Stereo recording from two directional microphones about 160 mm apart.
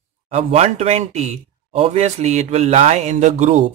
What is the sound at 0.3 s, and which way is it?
Speech, 40° right (ahead or behind).